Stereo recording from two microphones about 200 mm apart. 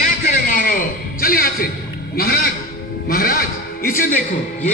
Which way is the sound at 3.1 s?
45° left (ahead or behind).